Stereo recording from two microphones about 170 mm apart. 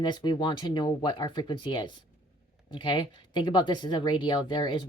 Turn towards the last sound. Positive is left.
turn(degrees=30)  # may be behind; listen again after turning